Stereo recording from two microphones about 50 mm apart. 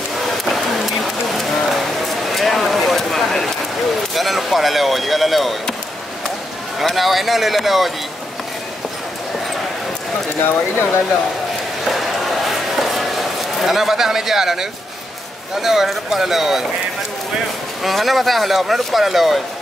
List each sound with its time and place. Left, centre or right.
0.5 s a sound: centre
4.1 s speech: centre
6.8 s speech: centre
10.3 s speech: left
11.9 s a sound: centre
15.6 s speech: centre
17.8 s speech: centre